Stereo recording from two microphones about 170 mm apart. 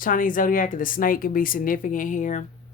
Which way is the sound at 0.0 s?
55° left (ahead or behind).